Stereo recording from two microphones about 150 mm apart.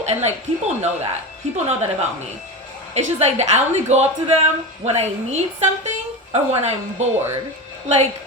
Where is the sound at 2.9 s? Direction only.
45° right (ahead or behind).